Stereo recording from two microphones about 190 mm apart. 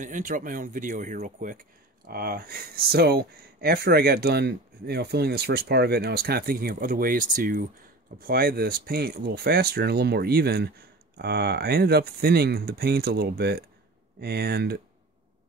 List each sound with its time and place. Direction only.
0.0 s speech: 45° right (ahead or behind)
2.0 s speech: 55° right (ahead or behind)